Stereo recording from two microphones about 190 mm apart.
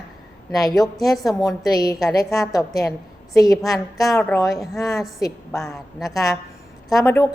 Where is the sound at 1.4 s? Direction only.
20° left (ahead or behind).